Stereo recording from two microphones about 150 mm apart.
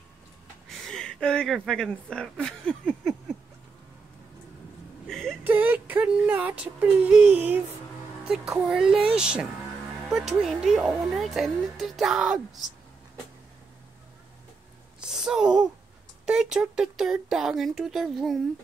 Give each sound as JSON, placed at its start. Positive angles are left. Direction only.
{"t": 0.7, "sound": "speech", "side_deg": 5}
{"t": 5.0, "sound": "whimper", "side_deg": 0}
{"t": 5.4, "sound": "speech", "side_deg": -10}
{"t": 15.0, "sound": "a sound", "side_deg": -5}
{"t": 16.3, "sound": "speech", "side_deg": -5}